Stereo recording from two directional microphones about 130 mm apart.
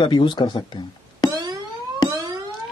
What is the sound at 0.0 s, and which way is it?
Speech, 35° left (ahead or behind).